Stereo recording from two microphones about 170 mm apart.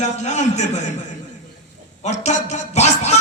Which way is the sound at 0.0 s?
45° left (ahead or behind).